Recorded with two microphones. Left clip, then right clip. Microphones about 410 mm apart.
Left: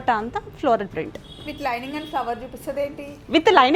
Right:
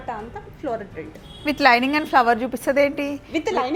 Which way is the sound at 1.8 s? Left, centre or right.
Right.